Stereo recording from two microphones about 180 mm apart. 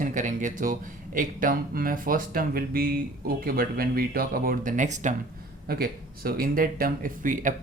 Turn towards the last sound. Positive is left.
turn(degrees=-45)  # may be behind; listen again after turning